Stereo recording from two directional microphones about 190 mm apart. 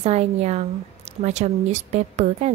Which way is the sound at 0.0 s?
35° right (ahead or behind).